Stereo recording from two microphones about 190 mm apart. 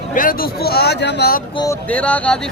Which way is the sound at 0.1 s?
45° left (ahead or behind).